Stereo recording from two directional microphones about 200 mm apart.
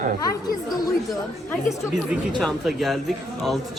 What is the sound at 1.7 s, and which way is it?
Speech, 5° right (ahead or behind).